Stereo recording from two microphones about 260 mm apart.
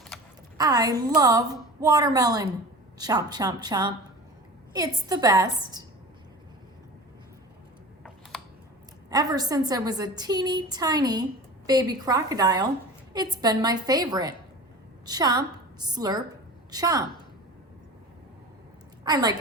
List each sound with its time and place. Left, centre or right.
0.5 s a woman's voice: centre
9.0 s a woman's voice: centre
19.0 s a woman's voice: centre